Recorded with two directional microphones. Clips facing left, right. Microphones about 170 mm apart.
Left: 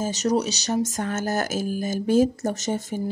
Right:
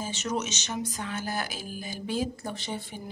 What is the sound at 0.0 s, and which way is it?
Speech, 40° left (ahead or behind).